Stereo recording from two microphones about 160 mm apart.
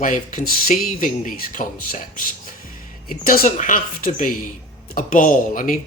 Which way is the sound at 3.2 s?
65° left (ahead or behind).